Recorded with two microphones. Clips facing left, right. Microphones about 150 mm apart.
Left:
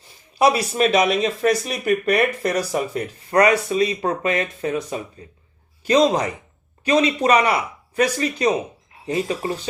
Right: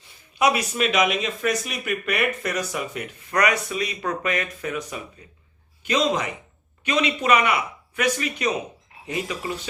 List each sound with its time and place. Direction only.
0.3 s speech: 35° left (ahead or behind)